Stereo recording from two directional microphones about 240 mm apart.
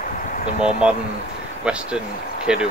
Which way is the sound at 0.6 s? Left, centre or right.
Right.